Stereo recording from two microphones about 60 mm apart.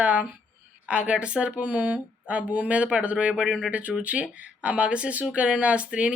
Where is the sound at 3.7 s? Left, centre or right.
Right.